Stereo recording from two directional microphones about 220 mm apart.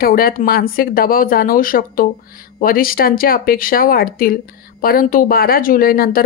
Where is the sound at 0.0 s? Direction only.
40° left (ahead or behind).